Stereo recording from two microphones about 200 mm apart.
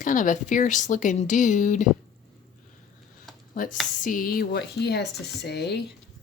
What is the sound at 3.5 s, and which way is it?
Speech, 40° left (ahead or behind).